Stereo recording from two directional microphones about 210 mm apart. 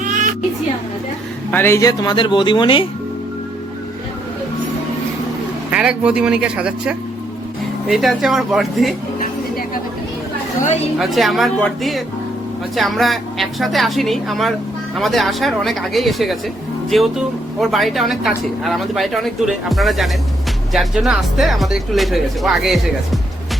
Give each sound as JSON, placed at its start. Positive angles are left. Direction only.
{"t": 0.0, "sound": "music", "side_deg": -40}
{"t": 1.5, "sound": "speech", "side_deg": 10}
{"t": 5.7, "sound": "speech", "side_deg": -5}
{"t": 10.9, "sound": "speech", "side_deg": 0}